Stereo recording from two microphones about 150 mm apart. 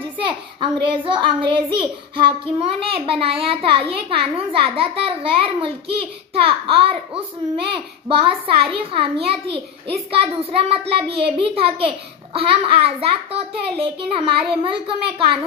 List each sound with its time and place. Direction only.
0.3 s a child's voice: 35° right (ahead or behind)